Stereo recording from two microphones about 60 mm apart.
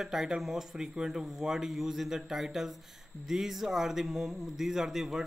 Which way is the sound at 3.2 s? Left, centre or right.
Centre.